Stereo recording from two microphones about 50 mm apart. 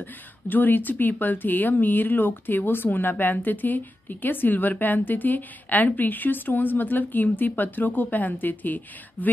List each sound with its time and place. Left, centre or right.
0.0 s speech: left